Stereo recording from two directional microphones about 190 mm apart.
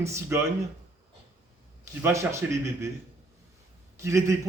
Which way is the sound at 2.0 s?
15° right (ahead or behind).